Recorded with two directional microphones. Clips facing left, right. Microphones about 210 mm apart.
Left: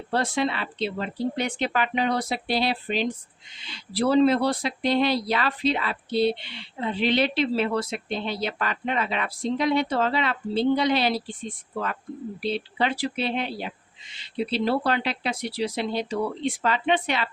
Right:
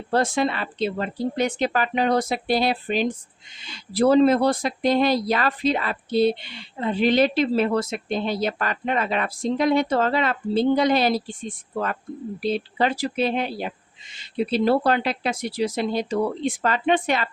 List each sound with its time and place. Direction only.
0.1 s speech: 45° right (ahead or behind)